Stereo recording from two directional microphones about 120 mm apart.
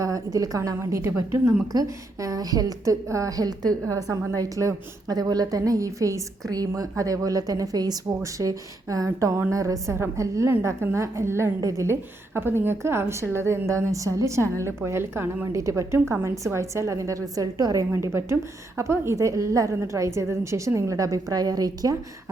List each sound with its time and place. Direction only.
0.0 s a woman's voice: 30° right (ahead or behind)